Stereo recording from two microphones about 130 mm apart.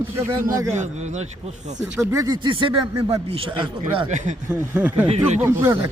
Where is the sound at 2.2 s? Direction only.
35° right (ahead or behind).